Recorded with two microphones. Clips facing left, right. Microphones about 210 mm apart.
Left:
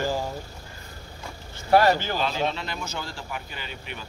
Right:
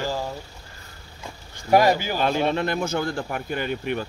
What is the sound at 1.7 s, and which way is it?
Speech, 15° right (ahead or behind).